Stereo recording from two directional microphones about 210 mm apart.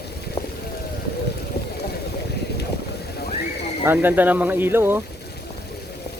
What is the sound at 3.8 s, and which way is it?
Speech, 10° right (ahead or behind).